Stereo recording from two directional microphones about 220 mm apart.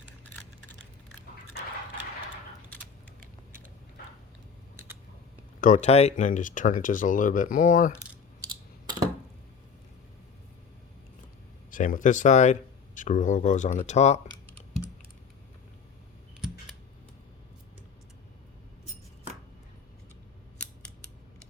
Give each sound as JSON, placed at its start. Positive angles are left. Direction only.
{"t": 5.5, "sound": "speech", "side_deg": 35}
{"t": 8.4, "sound": "typing", "side_deg": -20}
{"t": 11.7, "sound": "speech", "side_deg": 35}